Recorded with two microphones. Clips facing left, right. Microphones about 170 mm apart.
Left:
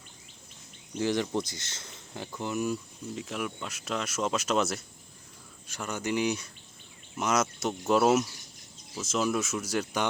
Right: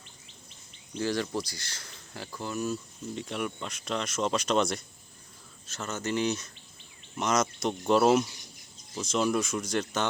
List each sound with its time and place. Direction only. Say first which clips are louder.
0.9 s speech: left 2 dB; 15° left (ahead or behind)
3.2 s speech: right 1 dB; 5° left (ahead or behind)